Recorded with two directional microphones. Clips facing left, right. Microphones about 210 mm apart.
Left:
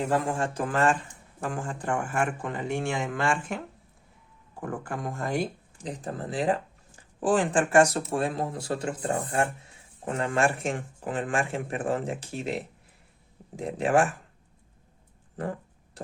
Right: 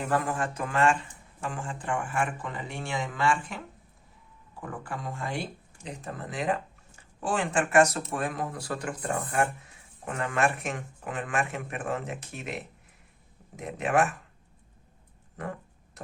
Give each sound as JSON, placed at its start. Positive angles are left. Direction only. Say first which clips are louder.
{"t": 0.0, "sound": "speech", "louder": "left 2 dB", "side_deg": 25}
{"t": 4.6, "sound": "speech", "louder": "left 4 dB", "side_deg": 45}
{"t": 15.4, "sound": "speech", "louder": "left 4 dB", "side_deg": 30}